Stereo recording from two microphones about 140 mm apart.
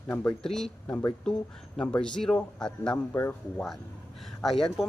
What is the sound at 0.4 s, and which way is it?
Speech, 5° left (ahead or behind).